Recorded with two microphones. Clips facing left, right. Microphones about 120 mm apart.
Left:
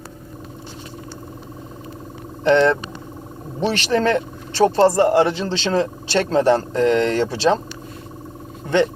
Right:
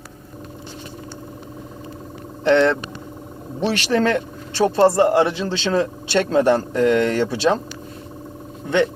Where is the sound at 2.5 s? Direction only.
40° left (ahead or behind).